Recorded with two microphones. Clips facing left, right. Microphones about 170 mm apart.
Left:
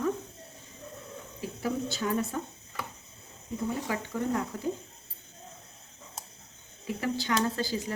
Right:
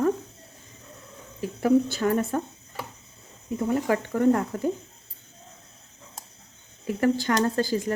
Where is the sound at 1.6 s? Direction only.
55° right (ahead or behind).